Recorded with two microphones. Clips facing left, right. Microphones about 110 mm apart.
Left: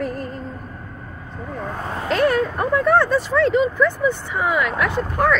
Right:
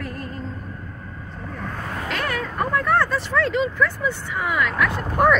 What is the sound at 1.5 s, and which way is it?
Vehicle, 20° left (ahead or behind).